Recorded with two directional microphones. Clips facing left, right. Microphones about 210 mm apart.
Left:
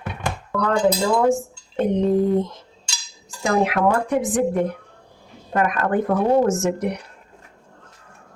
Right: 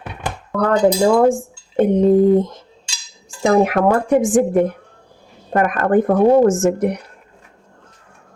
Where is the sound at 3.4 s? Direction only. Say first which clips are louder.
Right 5 dB; 50° right (ahead or behind).